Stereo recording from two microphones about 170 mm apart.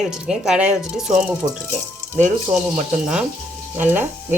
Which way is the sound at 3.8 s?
10° right (ahead or behind).